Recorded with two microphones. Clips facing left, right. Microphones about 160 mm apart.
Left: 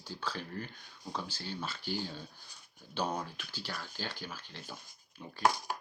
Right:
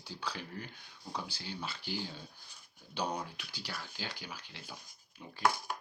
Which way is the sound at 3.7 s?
45° left (ahead or behind).